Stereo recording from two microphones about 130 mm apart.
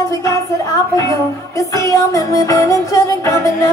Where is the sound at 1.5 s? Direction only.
25° left (ahead or behind).